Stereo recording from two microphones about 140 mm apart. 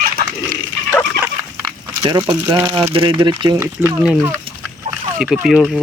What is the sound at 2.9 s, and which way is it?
Speech, 40° right (ahead or behind).